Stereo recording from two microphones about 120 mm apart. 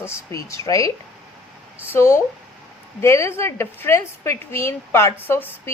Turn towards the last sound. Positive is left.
turn(degrees=20)  # may be behind; listen again after turning